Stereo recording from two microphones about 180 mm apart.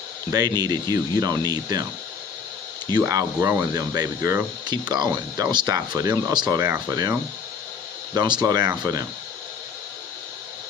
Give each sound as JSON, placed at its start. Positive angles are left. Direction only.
{"t": 0.3, "sound": "speech", "side_deg": -20}
{"t": 3.0, "sound": "speech", "side_deg": -15}